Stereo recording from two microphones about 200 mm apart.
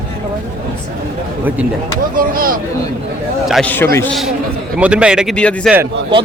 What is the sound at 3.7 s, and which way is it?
Speech, 10° left (ahead or behind).